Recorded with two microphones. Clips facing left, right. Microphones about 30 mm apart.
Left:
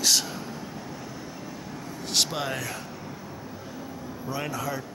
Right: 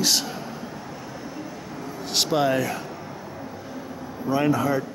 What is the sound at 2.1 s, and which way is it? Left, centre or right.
Speech, centre.